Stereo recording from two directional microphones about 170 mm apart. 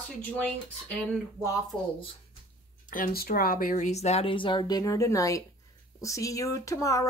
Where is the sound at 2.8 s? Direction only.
55° left (ahead or behind); by 7.0 s 20° left (ahead or behind).